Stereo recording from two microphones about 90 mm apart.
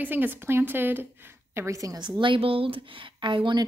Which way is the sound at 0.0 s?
20° right (ahead or behind).